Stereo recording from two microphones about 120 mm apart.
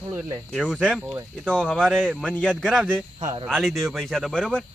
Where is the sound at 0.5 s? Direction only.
5° left (ahead or behind).